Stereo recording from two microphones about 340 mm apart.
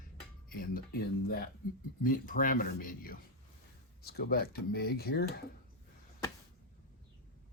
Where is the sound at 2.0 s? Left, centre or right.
Left.